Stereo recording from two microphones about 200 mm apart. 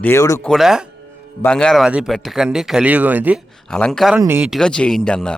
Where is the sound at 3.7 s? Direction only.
5° left (ahead or behind).